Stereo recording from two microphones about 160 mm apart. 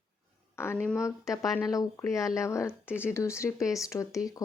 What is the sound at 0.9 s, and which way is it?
Speech, 20° left (ahead or behind).